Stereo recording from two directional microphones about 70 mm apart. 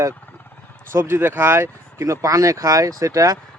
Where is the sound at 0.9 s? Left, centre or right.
Right.